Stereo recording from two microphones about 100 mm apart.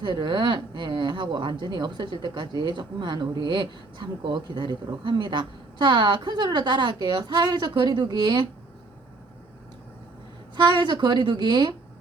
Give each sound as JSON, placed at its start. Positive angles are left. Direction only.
{"t": 0.0, "sound": "a woman's voice", "side_deg": -50}
{"t": 10.5, "sound": "a woman's voice", "side_deg": -55}